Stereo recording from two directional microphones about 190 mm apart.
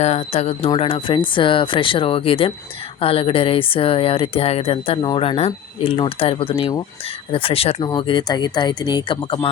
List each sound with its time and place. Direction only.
0.0 s speech: 35° left (ahead or behind)